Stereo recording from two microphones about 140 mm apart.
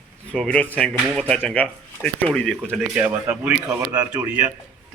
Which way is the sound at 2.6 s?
10° right (ahead or behind).